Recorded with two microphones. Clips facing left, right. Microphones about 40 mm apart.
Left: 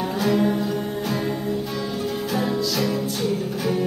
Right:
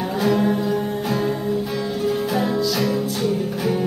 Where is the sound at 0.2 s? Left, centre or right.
Centre.